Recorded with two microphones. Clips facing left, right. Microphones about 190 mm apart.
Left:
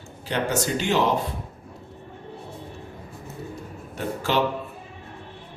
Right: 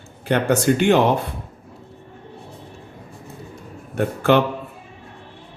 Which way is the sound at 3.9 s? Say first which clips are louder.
Right 8 dB; 60° right (ahead or behind).